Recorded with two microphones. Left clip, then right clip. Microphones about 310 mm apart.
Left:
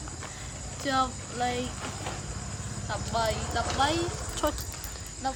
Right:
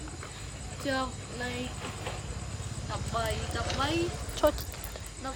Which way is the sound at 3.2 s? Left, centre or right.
Left.